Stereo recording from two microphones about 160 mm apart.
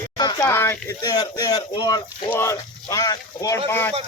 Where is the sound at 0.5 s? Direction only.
15° left (ahead or behind).